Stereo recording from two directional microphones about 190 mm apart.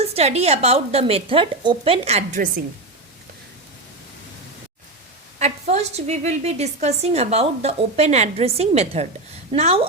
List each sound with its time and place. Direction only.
0.0 s a woman's voice: 35° right (ahead or behind)
5.4 s a woman's voice: 35° right (ahead or behind)